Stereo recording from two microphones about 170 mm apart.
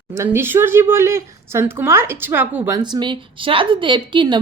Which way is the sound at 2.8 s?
25° right (ahead or behind).